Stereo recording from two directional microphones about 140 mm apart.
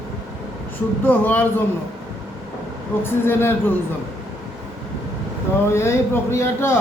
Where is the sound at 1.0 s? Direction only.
15° left (ahead or behind).